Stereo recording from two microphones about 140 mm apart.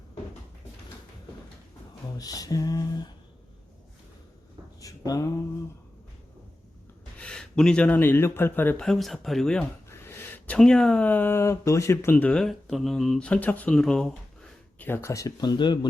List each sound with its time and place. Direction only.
2.1 s speech: 25° left (ahead or behind)
4.8 s a sound: 25° left (ahead or behind)
7.2 s speech: 5° left (ahead or behind)
9.9 s speech: 20° left (ahead or behind)
12.1 s speech: 10° left (ahead or behind)
14.8 s speech: 15° left (ahead or behind); by 15.9 s 35° left (ahead or behind)